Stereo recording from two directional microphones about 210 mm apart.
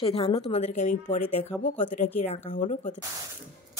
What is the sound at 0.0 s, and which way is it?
A woman's voice, 30° left (ahead or behind).